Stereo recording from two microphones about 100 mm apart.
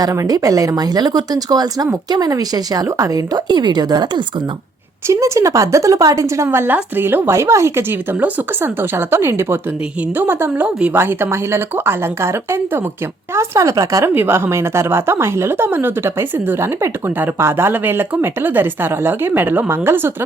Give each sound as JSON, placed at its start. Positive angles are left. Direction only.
{"t": 0.0, "sound": "a woman's voice", "side_deg": -40}
{"t": 5.0, "sound": "a woman's voice", "side_deg": -30}
{"t": 14.1, "sound": "a woman's voice", "side_deg": -20}